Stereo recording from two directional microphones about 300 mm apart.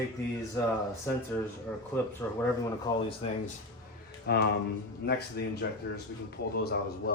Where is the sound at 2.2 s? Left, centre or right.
Centre.